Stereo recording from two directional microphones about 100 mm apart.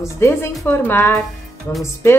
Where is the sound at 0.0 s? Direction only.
25° left (ahead or behind).